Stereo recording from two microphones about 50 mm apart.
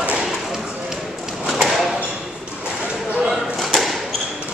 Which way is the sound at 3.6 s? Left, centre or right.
Centre.